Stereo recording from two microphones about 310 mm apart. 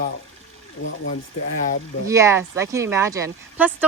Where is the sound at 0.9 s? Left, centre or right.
Left.